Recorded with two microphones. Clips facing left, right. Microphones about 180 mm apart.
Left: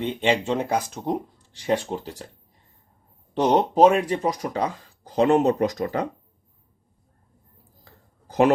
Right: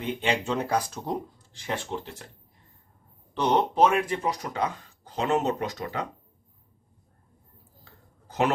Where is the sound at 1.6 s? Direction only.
40° left (ahead or behind).